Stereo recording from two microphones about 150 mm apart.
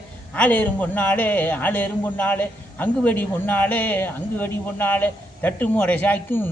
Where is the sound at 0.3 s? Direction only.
10° left (ahead or behind).